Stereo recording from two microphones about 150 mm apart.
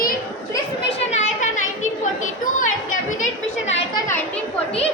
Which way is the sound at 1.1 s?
50° left (ahead or behind).